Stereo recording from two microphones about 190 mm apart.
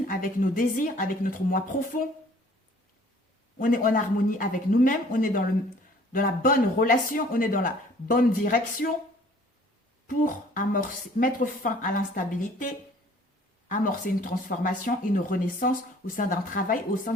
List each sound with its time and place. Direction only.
0.1 s speech: 45° left (ahead or behind)
3.6 s speech: 45° left (ahead or behind)
10.1 s speech: 45° left (ahead or behind)